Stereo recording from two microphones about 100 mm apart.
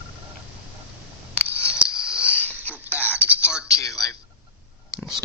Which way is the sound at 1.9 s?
5° right (ahead or behind).